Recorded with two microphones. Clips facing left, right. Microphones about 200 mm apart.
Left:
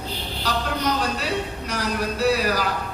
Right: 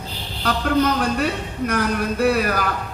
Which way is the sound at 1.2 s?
55° right (ahead or behind).